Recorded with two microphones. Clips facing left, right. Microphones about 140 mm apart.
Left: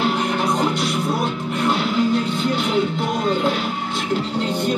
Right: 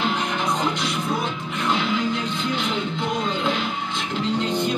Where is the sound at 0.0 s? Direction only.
45° left (ahead or behind).